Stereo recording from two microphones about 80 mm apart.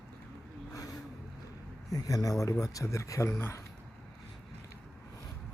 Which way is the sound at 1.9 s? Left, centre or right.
Left.